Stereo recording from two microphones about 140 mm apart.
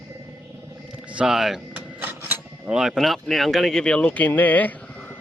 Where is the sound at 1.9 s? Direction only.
15° right (ahead or behind); by 5.1 s 10° left (ahead or behind).